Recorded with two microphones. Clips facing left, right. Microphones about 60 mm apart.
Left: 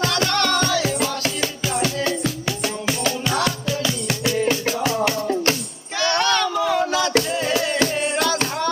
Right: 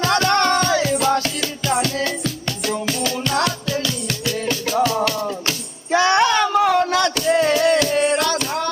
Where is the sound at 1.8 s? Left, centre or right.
Centre.